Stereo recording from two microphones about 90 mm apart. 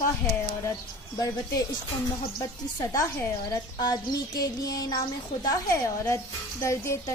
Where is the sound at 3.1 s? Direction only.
30° left (ahead or behind).